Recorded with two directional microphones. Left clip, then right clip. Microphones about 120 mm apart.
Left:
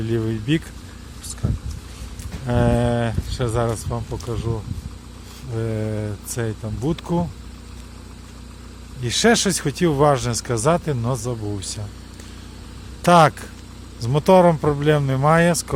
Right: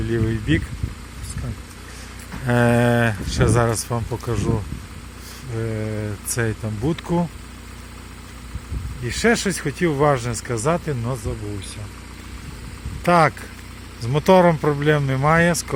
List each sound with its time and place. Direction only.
0.1 s speech: 15° left (ahead or behind)
2.5 s speech: 5° right (ahead or behind)
5.5 s mantra: 25° left (ahead or behind)
6.1 s speech: centre (ahead or behind)
9.0 s speech: 35° left (ahead or behind)
11.1 s speech: 45° left (ahead or behind)
13.0 s speech: 40° left (ahead or behind); by 14.8 s 10° left (ahead or behind)
14.8 s speech: 20° left (ahead or behind)